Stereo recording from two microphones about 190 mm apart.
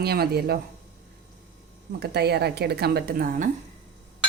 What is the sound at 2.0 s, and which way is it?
Speech, 60° right (ahead or behind).